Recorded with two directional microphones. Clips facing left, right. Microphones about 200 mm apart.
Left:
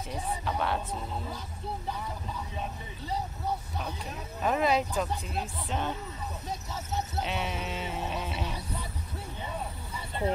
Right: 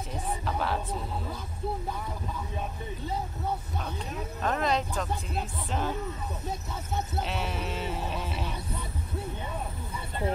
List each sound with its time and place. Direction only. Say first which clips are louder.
0.5 s speech: even; centre (ahead or behind)
4.4 s speech: left 2 dB; 5° left (ahead or behind)
7.2 s sheep: even; centre (ahead or behind)